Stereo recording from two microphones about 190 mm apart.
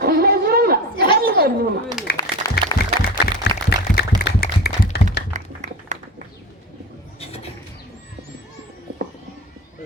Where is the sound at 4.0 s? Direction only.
55° left (ahead or behind).